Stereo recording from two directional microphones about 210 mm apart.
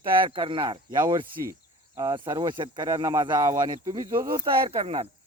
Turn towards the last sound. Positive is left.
turn(degrees=-25)  # may be behind; listen again after turning